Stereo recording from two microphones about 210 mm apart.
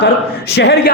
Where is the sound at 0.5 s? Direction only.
50° left (ahead or behind).